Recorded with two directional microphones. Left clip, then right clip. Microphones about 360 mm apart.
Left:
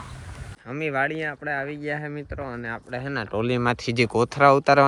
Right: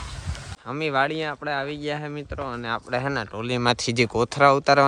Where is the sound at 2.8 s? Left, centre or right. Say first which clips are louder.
Right 6 dB; centre.